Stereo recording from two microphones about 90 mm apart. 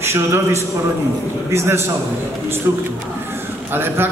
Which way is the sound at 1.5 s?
30° right (ahead or behind).